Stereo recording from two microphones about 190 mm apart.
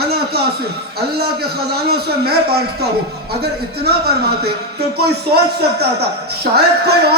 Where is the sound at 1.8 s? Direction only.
55° right (ahead or behind).